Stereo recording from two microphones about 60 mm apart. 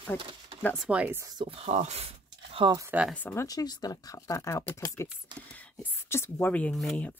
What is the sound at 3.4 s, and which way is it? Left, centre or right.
Speech, left.